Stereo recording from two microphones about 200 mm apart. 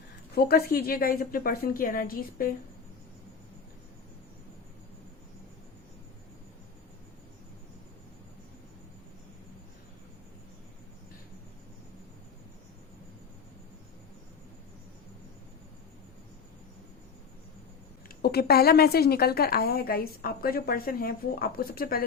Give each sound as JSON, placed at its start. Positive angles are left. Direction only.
{"t": 0.3, "sound": "a woman's voice", "side_deg": 50}
{"t": 18.2, "sound": "a woman's voice", "side_deg": 50}